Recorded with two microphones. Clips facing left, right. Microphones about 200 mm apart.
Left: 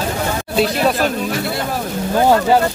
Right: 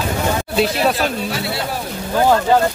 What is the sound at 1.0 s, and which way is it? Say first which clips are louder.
Speech: left 2 dB; 50° left (ahead or behind).